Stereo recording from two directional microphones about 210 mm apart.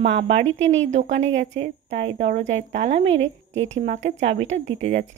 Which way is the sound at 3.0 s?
65° right (ahead or behind).